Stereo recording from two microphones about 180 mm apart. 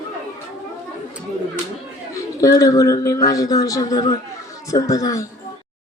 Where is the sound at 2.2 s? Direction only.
20° left (ahead or behind).